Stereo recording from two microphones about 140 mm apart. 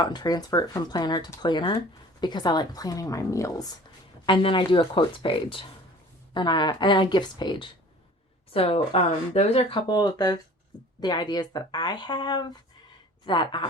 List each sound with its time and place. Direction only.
0.0 s speech: 30° left (ahead or behind)
4.3 s speech: 35° left (ahead or behind)
8.5 s speech: 45° left (ahead or behind)